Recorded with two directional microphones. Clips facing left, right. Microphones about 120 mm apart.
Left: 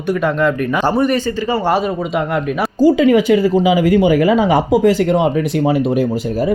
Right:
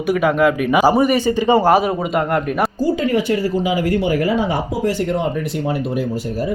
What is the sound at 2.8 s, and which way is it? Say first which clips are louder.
Speech: left 12 dB; 90° left.